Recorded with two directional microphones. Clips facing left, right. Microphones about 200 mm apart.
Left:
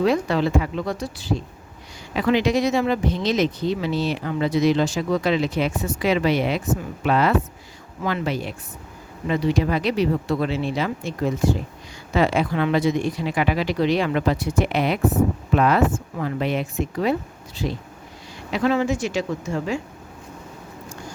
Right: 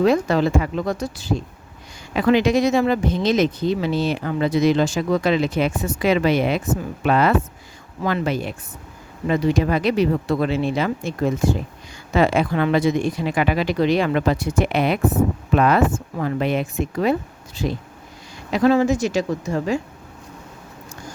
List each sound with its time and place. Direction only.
0.0 s speech: 45° right (ahead or behind)
18.5 s speech: 40° right (ahead or behind)